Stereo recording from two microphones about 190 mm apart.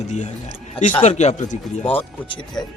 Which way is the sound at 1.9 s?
25° left (ahead or behind).